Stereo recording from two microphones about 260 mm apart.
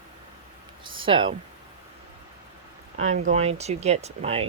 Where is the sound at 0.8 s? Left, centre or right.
Centre.